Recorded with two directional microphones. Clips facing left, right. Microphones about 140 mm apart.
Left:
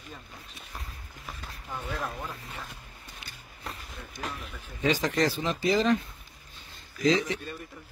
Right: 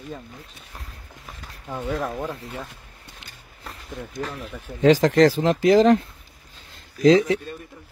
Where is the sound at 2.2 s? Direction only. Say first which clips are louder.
Right 9 dB; 90° right.